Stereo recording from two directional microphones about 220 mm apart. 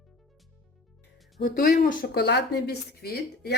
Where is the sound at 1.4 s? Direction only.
45° left (ahead or behind).